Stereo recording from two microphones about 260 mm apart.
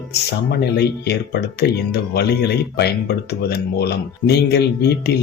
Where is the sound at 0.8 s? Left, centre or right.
Left.